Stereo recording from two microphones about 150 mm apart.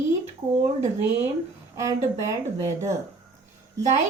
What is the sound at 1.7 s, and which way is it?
Speech, 20° right (ahead or behind).